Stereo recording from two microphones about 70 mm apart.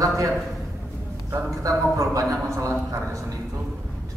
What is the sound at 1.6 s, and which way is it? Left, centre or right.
A man's voice, right.